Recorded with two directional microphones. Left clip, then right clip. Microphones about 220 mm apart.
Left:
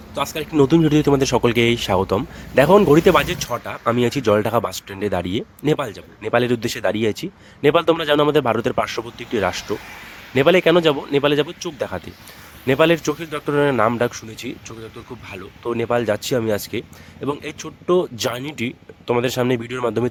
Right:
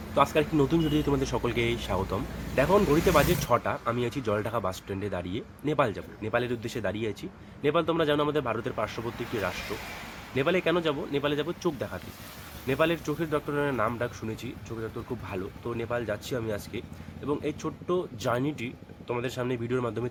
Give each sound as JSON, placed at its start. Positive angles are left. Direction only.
{"t": 0.3, "sound": "speech", "side_deg": 50}
{"t": 3.5, "sound": "speech", "side_deg": 0}
{"t": 3.8, "sound": "speech", "side_deg": 50}
{"t": 15.6, "sound": "speech", "side_deg": 50}